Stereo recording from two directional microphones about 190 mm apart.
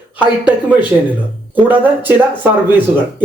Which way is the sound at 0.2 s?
5° right (ahead or behind).